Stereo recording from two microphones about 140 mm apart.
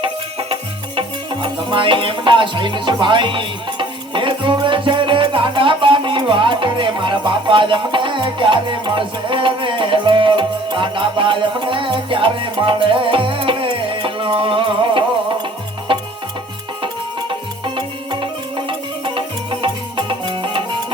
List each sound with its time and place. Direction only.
0.0 s music: 40° right (ahead or behind)
17.7 s music: 35° right (ahead or behind)